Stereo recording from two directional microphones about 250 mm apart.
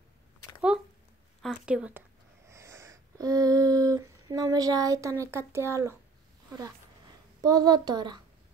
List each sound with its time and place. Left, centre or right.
1.4 s speech: centre
2.5 s a sound: centre
7.4 s a child's voice: centre